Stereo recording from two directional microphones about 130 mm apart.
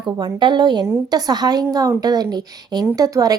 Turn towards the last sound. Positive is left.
turn(degrees=-30)  # may be behind; listen again after turning